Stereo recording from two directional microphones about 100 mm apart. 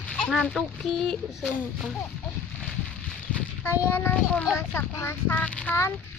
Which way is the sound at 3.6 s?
25° left (ahead or behind).